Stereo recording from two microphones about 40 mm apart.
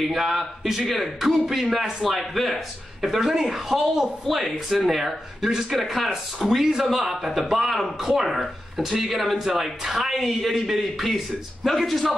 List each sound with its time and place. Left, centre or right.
0.0 s speech: centre
5.7 s speech: centre
6.5 s speech: centre